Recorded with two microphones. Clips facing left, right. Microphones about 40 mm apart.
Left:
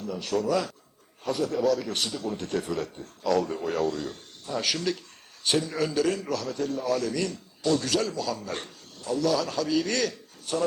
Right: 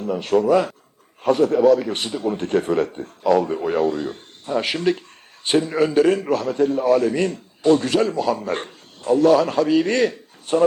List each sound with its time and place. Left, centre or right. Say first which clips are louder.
0.0 s speech: right 9 dB; right